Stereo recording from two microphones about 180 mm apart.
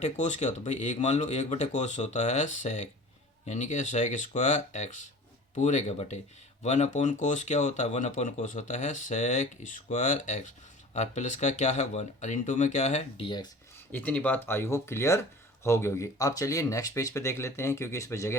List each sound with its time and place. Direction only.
0.0 s speech: 40° left (ahead or behind)
13.9 s speech: 10° left (ahead or behind)